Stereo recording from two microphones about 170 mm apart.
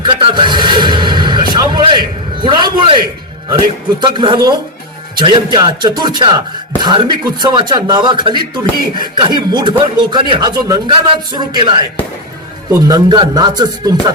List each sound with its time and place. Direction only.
0.0 s music: 30° right (ahead or behind)
1.5 s a sound: 25° right (ahead or behind)
4.0 s speech: 30° right (ahead or behind)